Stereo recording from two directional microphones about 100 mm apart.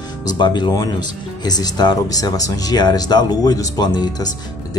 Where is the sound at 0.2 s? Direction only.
45° left (ahead or behind).